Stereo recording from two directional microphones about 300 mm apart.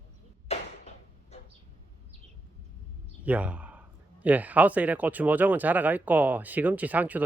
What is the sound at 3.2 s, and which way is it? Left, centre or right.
Speech, centre.